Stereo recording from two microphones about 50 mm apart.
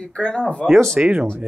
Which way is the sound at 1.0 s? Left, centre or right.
Centre.